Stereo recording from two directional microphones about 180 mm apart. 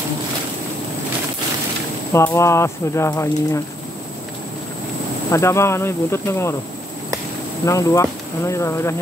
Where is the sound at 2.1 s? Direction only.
15° left (ahead or behind).